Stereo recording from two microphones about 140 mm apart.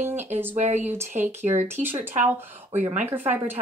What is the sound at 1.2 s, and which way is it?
A woman's voice, 15° right (ahead or behind).